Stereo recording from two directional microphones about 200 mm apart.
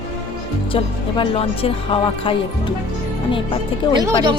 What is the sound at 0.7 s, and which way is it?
Speech, 25° left (ahead or behind).